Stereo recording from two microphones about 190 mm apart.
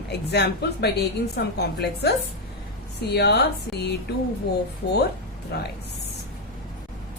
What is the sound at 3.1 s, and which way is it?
Speech, 60° left (ahead or behind).